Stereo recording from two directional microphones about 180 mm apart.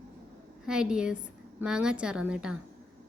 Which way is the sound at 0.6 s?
5° right (ahead or behind).